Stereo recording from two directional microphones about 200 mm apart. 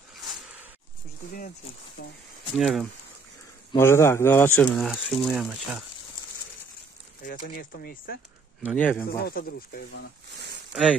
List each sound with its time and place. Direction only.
2.5 s speech: centre (ahead or behind)
3.7 s speech: 10° left (ahead or behind)
7.2 s speech: 45° left (ahead or behind)
8.7 s speech: 5° left (ahead or behind)
9.1 s speech: 50° left (ahead or behind)
10.7 s speech: 5° right (ahead or behind)